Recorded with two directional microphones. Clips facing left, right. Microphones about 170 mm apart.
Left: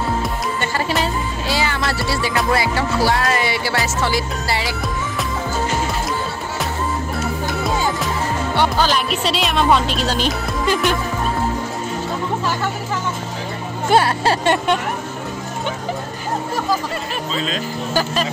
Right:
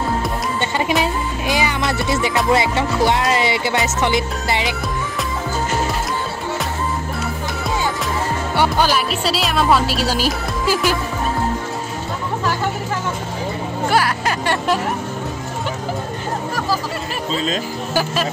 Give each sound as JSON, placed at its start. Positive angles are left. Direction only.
{"t": 0.6, "sound": "music", "side_deg": -20}
{"t": 8.5, "sound": "music", "side_deg": -10}
{"t": 13.8, "sound": "speech", "side_deg": 25}
{"t": 17.9, "sound": "music", "side_deg": -5}